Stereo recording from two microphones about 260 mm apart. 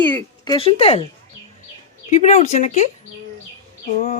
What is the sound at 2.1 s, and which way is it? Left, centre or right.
Speech, left.